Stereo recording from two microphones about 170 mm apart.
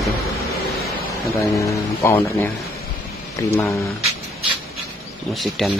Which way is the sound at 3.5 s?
20° left (ahead or behind).